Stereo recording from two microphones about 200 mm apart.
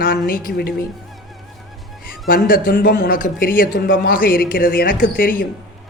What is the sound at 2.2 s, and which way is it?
A man's voice, 45° left (ahead or behind).